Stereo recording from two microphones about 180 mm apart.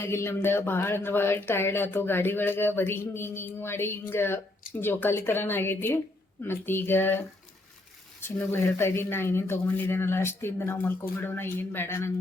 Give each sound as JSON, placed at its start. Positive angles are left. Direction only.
{"t": 0.0, "sound": "speech", "side_deg": 15}